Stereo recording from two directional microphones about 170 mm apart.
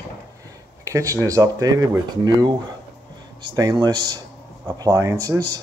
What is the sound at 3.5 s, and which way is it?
Speech, 20° right (ahead or behind).